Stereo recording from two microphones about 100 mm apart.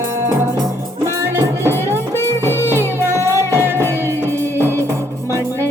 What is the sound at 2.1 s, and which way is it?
Music, 25° left (ahead or behind).